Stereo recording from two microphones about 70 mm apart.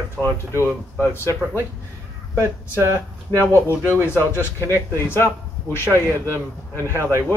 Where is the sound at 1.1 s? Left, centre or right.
Left.